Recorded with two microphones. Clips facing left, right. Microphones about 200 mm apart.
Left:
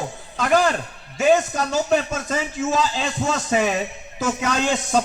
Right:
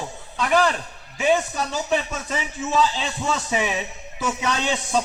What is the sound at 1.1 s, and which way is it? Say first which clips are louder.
A man's voice: left 3 dB; 45° left (ahead or behind).